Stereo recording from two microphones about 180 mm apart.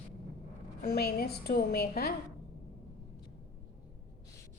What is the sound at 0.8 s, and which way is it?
A woman's voice, 60° left (ahead or behind).